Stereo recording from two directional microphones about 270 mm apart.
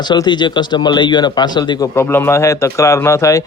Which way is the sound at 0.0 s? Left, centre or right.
Centre.